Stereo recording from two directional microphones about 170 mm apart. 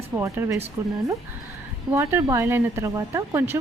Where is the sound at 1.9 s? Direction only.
15° right (ahead or behind).